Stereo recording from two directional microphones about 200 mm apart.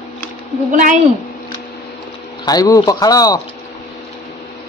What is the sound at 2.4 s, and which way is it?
Speech, 20° left (ahead or behind).